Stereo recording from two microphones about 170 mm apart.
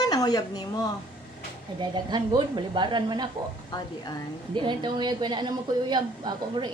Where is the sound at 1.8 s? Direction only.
25° right (ahead or behind).